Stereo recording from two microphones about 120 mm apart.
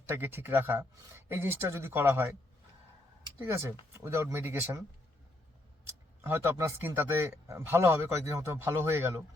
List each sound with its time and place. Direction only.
0.0 s speech: 15° right (ahead or behind)
3.4 s speech: 20° right (ahead or behind)
5.8 s speech: 20° right (ahead or behind)